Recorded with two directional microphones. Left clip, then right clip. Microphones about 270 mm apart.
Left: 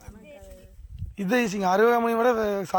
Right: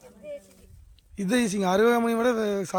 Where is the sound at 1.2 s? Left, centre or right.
Centre.